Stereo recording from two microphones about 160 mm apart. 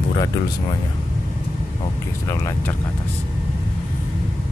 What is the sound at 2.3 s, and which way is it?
Speech, 15° left (ahead or behind).